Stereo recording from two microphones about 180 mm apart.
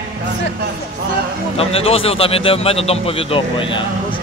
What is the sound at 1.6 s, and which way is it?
A man's voice, 35° left (ahead or behind).